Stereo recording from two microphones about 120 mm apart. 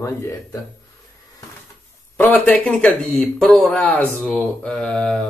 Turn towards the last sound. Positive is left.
turn(degrees=5)  # may be behind; listen again after turning